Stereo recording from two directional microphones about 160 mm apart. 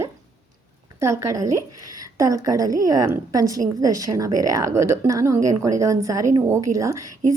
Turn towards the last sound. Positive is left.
turn(degrees=-20)  # may be behind; listen again after turning